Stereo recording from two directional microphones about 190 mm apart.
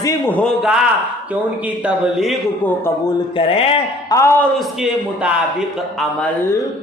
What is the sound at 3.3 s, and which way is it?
Mantra, 30° left (ahead or behind).